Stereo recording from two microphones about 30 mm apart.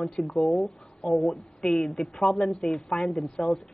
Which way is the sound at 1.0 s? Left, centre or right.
Centre.